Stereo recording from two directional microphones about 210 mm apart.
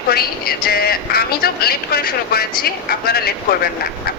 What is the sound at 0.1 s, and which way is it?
Speech, 45° left (ahead or behind).